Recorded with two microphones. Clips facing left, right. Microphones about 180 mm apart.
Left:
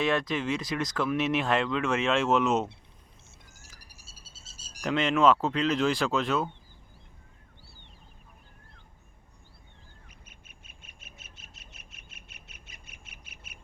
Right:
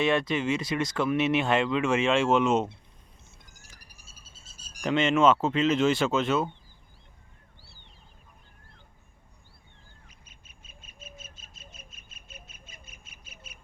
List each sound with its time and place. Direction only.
0.0 s speech: centre (ahead or behind)
3.8 s frog: 30° left (ahead or behind)
4.8 s speech: centre (ahead or behind)
10.1 s bird: 60° left (ahead or behind)